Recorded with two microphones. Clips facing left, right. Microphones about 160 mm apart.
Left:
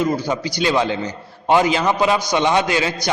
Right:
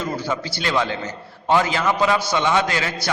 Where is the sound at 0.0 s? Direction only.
15° left (ahead or behind).